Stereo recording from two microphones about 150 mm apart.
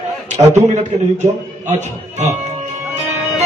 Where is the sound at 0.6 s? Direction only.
50° right (ahead or behind).